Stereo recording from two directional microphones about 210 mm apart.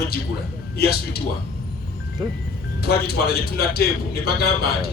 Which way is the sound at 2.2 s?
20° right (ahead or behind).